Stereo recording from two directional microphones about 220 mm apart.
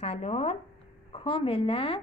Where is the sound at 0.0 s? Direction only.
30° left (ahead or behind).